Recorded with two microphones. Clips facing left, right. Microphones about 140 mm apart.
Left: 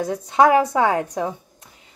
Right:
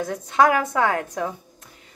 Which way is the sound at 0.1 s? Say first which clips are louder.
Left 3 dB; 20° left (ahead or behind).